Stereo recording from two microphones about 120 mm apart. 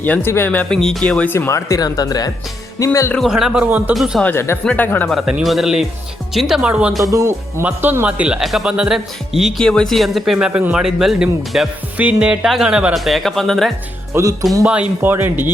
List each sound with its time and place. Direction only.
0.0 s speech: 15° left (ahead or behind)
3.2 s speech: 5° right (ahead or behind)
3.9 s speech: 5° right (ahead or behind)
4.2 s speech: 20° left (ahead or behind)
5.0 s speech: centre (ahead or behind)
7.1 s speech: 25° right (ahead or behind); by 13.7 s centre (ahead or behind)
14.1 s speech: 25° right (ahead or behind)
14.6 s speech: 10° right (ahead or behind)